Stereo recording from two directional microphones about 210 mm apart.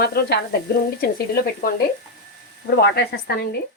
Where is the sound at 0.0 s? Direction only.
50° left (ahead or behind).